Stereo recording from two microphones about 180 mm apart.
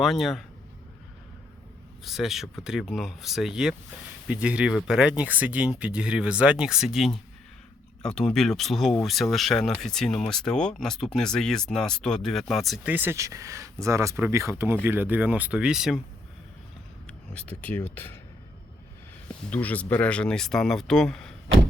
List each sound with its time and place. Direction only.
0.0 s speech: centre (ahead or behind)
2.0 s speech: centre (ahead or behind)
17.1 s speech: 5° left (ahead or behind)
19.5 s speech: 10° left (ahead or behind)